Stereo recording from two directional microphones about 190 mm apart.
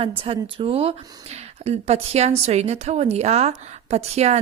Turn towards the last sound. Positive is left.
turn(degrees=-35)  # may be behind; listen again after turning